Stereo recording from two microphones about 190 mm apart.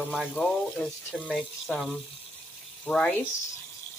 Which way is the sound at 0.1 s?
Centre (ahead or behind).